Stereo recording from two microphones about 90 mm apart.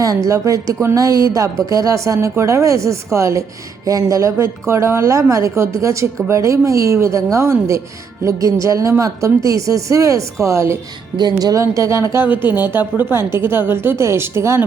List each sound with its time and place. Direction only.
0.0 s a woman's voice: 40° right (ahead or behind)
11.2 s speech: 50° right (ahead or behind)
11.6 s a woman's voice: 35° right (ahead or behind)
12.5 s a woman's voice: 20° right (ahead or behind)